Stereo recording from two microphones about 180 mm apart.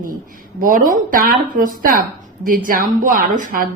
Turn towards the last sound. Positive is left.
turn(degrees=-50)  # may be behind; listen again after turning